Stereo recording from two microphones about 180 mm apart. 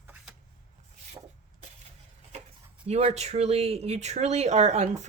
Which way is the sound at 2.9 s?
35° right (ahead or behind).